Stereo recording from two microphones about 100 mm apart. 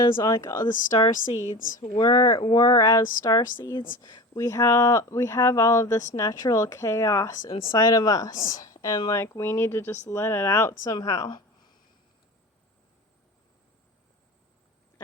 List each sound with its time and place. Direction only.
0.0 s speech: 40° left (ahead or behind)
4.4 s speech: 30° left (ahead or behind)
11.3 s a sound: 45° left (ahead or behind)